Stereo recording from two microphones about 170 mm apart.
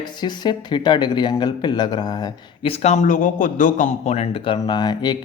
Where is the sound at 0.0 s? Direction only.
25° left (ahead or behind).